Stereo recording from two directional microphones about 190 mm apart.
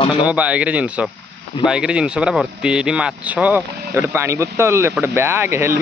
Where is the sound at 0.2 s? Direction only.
5° right (ahead or behind).